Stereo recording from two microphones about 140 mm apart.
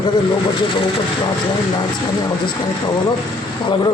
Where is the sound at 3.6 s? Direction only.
35° left (ahead or behind).